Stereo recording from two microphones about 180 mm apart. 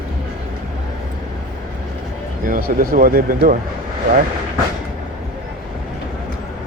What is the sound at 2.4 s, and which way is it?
Speech, 50° right (ahead or behind).